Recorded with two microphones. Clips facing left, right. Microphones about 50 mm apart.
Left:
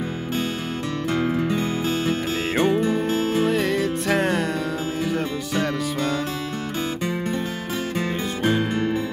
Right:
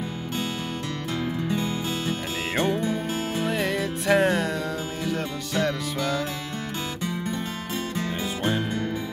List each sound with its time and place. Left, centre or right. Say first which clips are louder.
1.5 s music: left 4 dB; left
2.5 s music: left 4 dB; centre
2.8 s music: left 6 dB; left
3.4 s music: left 4 dB; centre
8.5 s music: left 5 dB; left